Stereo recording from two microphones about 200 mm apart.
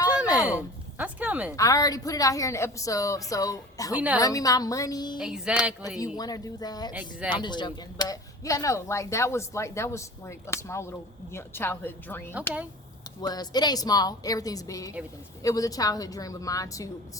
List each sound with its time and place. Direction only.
0.2 s a sound: 5° right (ahead or behind)
1.5 s speech: 15° left (ahead or behind)
3.9 s a woman's voice: 5° right (ahead or behind)
4.2 s speech: 15° left (ahead or behind)
5.2 s speech: 5° right (ahead or behind)
6.1 s a woman's voice: 20° left (ahead or behind)